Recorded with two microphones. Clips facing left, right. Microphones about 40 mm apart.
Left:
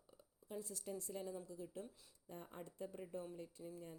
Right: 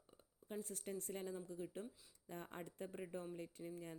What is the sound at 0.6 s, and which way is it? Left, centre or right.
A woman's voice, right.